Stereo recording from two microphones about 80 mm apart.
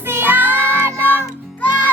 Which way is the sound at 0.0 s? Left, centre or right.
Right.